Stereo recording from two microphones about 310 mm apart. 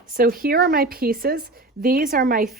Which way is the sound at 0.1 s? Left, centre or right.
Right.